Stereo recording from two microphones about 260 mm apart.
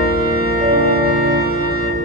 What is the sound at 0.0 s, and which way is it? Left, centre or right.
Organ, left.